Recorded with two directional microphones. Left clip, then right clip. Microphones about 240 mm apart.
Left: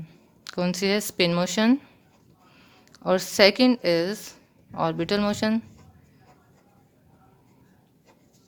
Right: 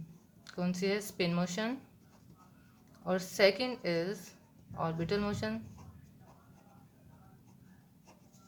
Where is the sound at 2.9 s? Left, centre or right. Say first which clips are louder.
Left 12 dB; left.